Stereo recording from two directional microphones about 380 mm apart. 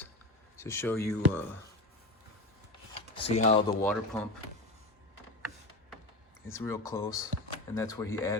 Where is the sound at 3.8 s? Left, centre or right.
Centre.